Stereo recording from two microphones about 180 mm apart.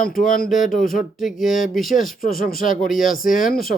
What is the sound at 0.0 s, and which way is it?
Speech, 50° left (ahead or behind).